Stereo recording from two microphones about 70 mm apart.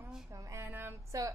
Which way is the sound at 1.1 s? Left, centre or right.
Right.